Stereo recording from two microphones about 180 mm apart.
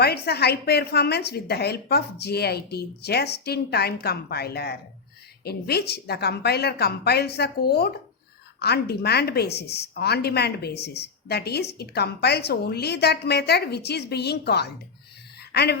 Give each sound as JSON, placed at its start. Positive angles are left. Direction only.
{"t": 0.0, "sound": "a woman's voice", "side_deg": 60}